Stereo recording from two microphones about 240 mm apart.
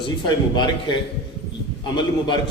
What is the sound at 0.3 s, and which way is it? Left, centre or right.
Speech, centre.